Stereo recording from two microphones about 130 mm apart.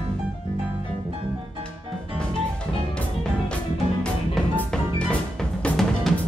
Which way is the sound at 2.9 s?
10° left (ahead or behind).